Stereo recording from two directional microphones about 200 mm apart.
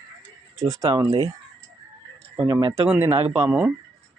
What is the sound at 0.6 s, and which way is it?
Speech, 20° right (ahead or behind).